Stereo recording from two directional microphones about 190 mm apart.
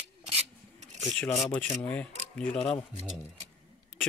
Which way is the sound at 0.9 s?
5° left (ahead or behind).